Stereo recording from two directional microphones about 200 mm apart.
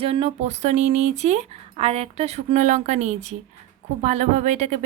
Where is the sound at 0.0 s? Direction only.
30° right (ahead or behind).